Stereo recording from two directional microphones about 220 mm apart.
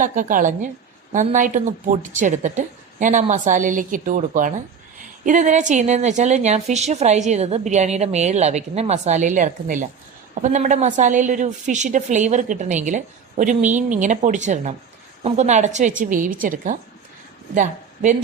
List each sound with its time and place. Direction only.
0.0 s a woman's voice: 35° right (ahead or behind)